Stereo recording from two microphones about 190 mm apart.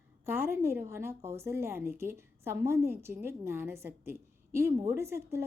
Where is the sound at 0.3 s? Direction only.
10° right (ahead or behind).